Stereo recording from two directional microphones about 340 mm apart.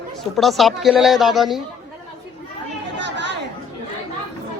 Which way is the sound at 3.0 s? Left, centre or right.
Right.